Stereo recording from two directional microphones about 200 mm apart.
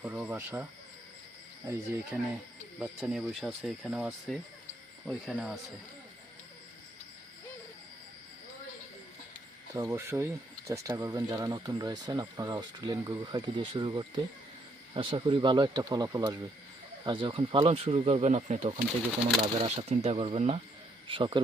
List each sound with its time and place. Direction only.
0.0 s speech: 10° right (ahead or behind)
9.7 s speech: 15° right (ahead or behind); by 18.7 s 35° right (ahead or behind)
18.8 s speech: 5° right (ahead or behind)
19.6 s speech: 35° right (ahead or behind)